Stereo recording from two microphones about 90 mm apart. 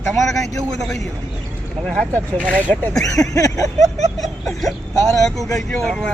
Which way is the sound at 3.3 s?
40° left (ahead or behind).